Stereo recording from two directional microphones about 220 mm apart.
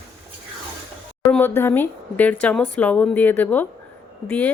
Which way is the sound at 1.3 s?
10° left (ahead or behind).